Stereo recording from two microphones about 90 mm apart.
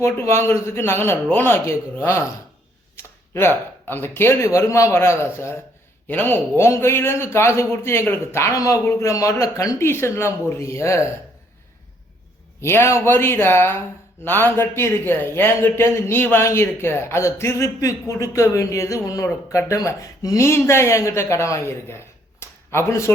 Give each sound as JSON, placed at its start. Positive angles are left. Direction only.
{"t": 0.0, "sound": "speech", "side_deg": 30}
{"t": 12.6, "sound": "speech", "side_deg": 30}